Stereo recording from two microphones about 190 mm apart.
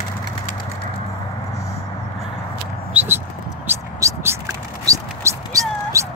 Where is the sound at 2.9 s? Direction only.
10° right (ahead or behind).